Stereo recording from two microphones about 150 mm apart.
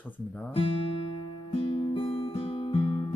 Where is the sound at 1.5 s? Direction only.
40° left (ahead or behind).